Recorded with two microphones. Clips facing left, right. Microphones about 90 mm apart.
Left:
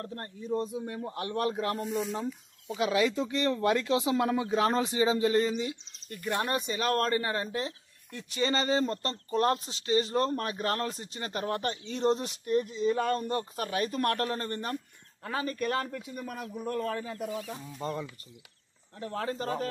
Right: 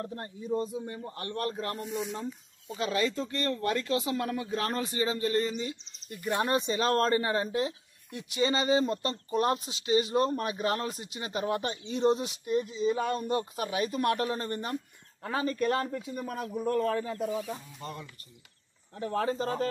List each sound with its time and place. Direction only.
0.0 s a man's voice: 15° right (ahead or behind); by 5.8 s 10° left (ahead or behind)
6.0 s speech: 15° right (ahead or behind)
15.2 s a man's voice: 30° right (ahead or behind)
17.3 s speech: 10° right (ahead or behind)
18.9 s speech: 25° right (ahead or behind)